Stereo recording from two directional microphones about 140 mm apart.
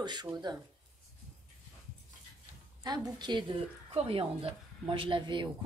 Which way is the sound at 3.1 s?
35° right (ahead or behind).